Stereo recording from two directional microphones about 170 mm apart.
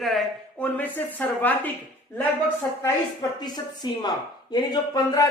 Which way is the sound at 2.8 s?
20° left (ahead or behind).